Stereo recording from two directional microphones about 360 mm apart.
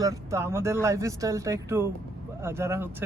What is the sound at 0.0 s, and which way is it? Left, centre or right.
A man's voice, centre.